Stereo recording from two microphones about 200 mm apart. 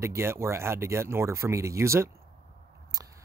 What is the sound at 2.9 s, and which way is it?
Scissors, 20° right (ahead or behind).